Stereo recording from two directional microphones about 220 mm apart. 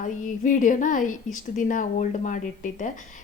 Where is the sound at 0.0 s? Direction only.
35° left (ahead or behind).